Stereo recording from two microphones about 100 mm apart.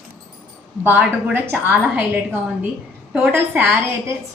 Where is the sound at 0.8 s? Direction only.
20° right (ahead or behind).